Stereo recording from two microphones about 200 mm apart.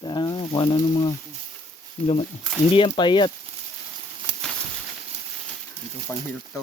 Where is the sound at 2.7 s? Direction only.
25° left (ahead or behind).